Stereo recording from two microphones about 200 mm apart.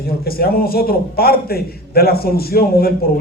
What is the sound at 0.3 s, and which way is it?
A man's voice, 50° left (ahead or behind).